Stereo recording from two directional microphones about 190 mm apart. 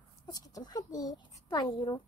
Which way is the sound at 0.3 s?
20° left (ahead or behind).